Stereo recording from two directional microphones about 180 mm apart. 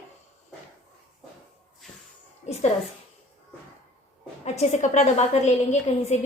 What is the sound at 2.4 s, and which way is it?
Speech, 40° left (ahead or behind).